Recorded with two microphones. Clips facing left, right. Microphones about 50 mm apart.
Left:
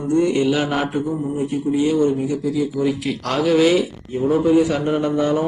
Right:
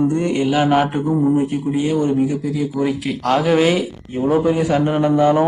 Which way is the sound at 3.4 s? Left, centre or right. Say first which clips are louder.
Left 4 dB; right.